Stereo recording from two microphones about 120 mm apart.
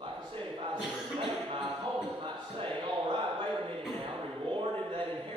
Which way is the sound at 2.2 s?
45° right (ahead or behind).